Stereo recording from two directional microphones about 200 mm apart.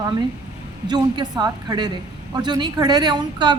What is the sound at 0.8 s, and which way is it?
A woman's voice, 20° right (ahead or behind).